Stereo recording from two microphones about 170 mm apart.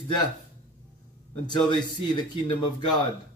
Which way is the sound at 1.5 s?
25° left (ahead or behind).